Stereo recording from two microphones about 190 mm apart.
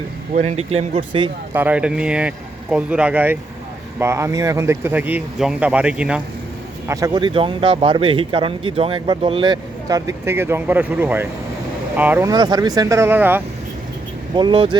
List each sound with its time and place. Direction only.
0.3 s speech: 35° right (ahead or behind)
1.5 s speech: 10° right (ahead or behind)
6.8 s speech: 15° right (ahead or behind)
14.3 s speech: 25° right (ahead or behind)